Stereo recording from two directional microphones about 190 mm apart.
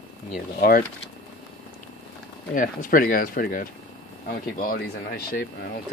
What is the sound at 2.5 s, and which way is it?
Speech, 45° left (ahead or behind).